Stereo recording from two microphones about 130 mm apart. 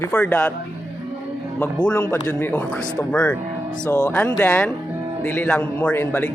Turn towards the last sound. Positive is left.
turn(degrees=10)  # may be behind; listen again after turning